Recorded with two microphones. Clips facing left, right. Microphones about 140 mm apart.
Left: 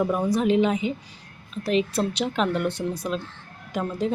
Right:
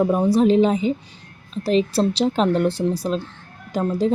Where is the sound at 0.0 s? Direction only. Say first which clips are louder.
Right 6 dB; 30° right (ahead or behind).